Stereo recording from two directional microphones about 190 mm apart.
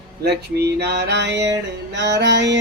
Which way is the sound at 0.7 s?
60° right (ahead or behind).